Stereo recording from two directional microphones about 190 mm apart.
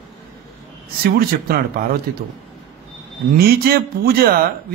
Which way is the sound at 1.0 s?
55° right (ahead or behind).